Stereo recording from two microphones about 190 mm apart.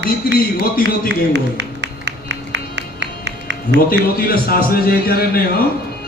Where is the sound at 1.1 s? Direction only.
70° right (ahead or behind).